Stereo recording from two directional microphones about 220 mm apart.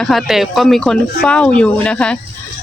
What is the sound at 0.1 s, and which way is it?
Speech, centre (ahead or behind).